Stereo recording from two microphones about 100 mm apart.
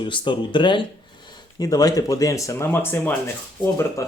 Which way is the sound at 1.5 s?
40° left (ahead or behind).